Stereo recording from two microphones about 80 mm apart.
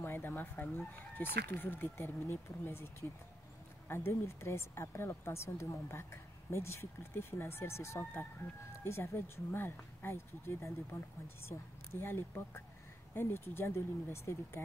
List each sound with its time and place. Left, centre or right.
0.0 s speech: left